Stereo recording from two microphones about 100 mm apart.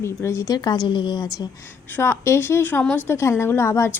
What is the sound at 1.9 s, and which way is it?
A woman's voice, 25° left (ahead or behind).